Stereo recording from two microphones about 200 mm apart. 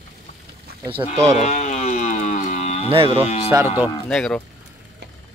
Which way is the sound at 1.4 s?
35° left (ahead or behind).